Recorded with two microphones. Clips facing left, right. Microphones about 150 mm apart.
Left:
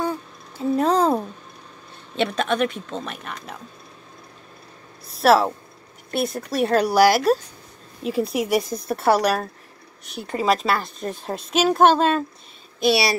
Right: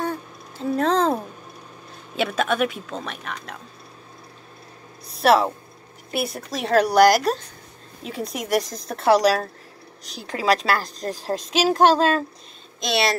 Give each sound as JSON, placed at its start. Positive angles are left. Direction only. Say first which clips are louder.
{"t": 0.0, "sound": "a sound", "louder": "left 2 dB", "side_deg": 5}
{"t": 2.1, "sound": "speech", "louder": "even", "side_deg": -5}
{"t": 5.1, "sound": "speech", "louder": "left 1 dB", "side_deg": 0}
{"t": 11.0, "sound": "a woman's voice", "louder": "even", "side_deg": -35}
{"t": 11.2, "sound": "a woman's voice", "louder": "left 1 dB", "side_deg": 0}